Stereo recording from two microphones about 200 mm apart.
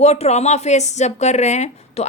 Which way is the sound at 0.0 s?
30° left (ahead or behind).